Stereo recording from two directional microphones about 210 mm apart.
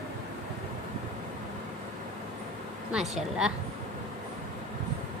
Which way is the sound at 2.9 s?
5° right (ahead or behind).